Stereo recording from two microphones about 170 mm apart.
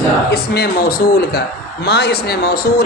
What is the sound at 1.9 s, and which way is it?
Speech, 75° left (ahead or behind).